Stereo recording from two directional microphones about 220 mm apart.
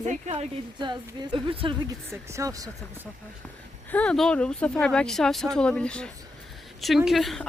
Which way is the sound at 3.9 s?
5° left (ahead or behind).